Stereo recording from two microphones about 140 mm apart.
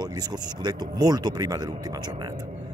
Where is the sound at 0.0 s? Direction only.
30° right (ahead or behind).